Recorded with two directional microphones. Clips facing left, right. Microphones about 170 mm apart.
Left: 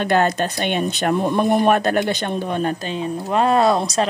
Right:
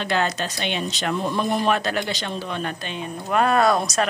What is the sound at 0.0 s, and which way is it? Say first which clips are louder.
Speech: left 6 dB; 50° left (ahead or behind).